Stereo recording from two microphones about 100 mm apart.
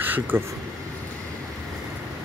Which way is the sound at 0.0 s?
20° right (ahead or behind).